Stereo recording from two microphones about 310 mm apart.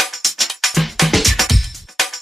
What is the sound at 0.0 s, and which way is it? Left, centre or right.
Music, centre.